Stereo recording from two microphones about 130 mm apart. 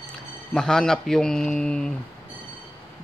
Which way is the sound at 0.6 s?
5° left (ahead or behind).